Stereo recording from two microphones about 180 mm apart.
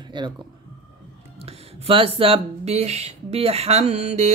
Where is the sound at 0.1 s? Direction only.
25° right (ahead or behind).